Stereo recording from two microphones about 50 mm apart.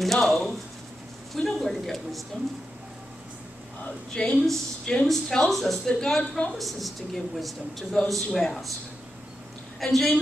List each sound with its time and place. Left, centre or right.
0.0 s a woman's voice: centre
4.1 s a woman's voice: centre
9.8 s a woman's voice: centre